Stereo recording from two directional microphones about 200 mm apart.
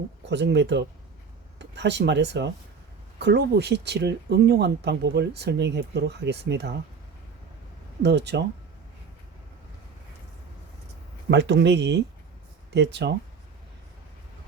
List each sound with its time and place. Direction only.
0.3 s speech: 60° right (ahead or behind)
8.0 s speech: 55° right (ahead or behind)
11.3 s speech: 60° right (ahead or behind)